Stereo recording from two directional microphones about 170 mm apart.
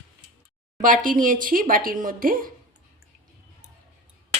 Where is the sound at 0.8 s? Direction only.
50° right (ahead or behind).